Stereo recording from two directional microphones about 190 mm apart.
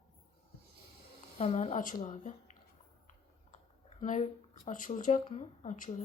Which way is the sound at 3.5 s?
40° left (ahead or behind).